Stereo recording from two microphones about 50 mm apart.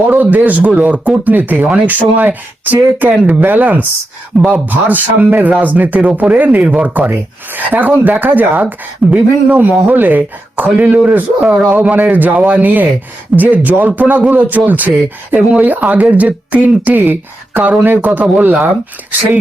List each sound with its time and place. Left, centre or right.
0.1 s speech: right
8.6 s speech: right